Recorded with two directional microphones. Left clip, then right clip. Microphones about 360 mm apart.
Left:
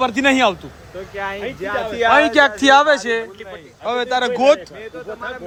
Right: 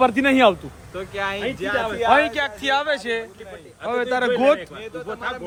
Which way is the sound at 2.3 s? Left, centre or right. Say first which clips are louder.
Left 10 dB; centre.